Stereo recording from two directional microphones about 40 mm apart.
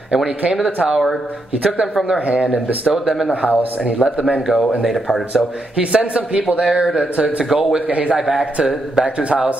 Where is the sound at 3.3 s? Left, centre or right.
Right.